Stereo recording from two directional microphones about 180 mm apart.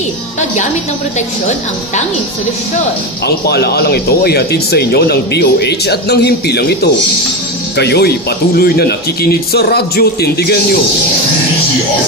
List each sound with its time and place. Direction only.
3.4 s speech: 65° left (ahead or behind)